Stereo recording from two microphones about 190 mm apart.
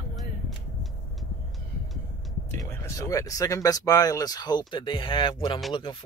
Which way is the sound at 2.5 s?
15° left (ahead or behind).